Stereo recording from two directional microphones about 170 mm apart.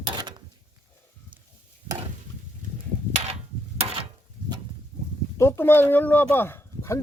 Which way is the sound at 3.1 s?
40° right (ahead or behind).